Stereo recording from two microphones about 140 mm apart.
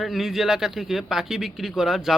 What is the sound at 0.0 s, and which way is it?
A man's voice, centre (ahead or behind).